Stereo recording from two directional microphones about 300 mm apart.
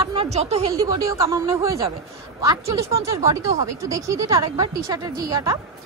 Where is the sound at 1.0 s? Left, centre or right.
Centre.